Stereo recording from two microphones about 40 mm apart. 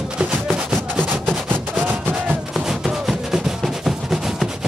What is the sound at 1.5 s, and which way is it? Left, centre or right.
Music, right.